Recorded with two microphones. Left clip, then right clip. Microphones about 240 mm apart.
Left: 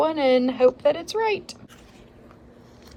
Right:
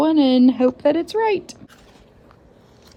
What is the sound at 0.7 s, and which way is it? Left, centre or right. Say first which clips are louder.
Speech: right 4 dB; centre.